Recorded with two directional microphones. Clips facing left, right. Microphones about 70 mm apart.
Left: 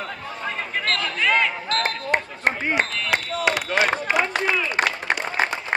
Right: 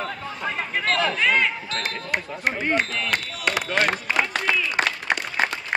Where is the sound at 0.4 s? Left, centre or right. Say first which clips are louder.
Right 1 dB; centre.